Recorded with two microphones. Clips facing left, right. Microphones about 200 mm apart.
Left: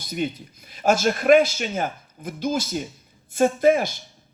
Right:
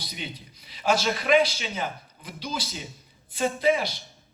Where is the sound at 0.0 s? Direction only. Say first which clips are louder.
Left 11 dB; 50° left (ahead or behind).